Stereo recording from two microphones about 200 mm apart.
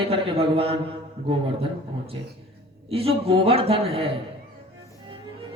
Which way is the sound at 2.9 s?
30° right (ahead or behind).